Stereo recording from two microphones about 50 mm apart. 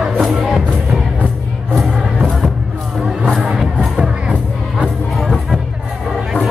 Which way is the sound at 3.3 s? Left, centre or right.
Centre.